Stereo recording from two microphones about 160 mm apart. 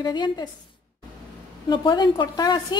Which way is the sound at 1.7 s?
30° left (ahead or behind).